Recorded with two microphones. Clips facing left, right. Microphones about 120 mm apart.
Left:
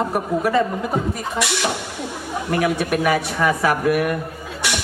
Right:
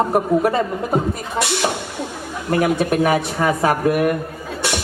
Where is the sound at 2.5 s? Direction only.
30° right (ahead or behind).